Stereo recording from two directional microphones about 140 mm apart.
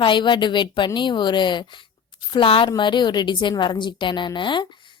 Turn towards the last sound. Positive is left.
turn(degrees=35)  # may be behind; listen again after turning